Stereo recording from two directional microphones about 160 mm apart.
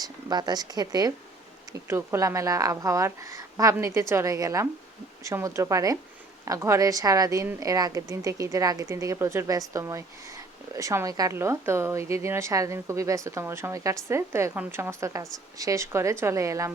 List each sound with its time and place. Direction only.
0.0 s a woman's voice: 25° right (ahead or behind)